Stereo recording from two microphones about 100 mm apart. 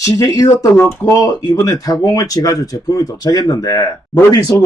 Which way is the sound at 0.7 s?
25° left (ahead or behind).